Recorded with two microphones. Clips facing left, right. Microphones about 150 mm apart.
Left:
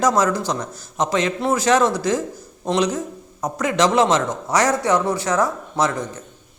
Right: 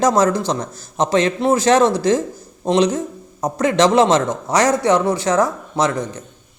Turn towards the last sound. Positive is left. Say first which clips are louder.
# right 2 dB
turn(degrees=-20)  # may be behind; listen again after turning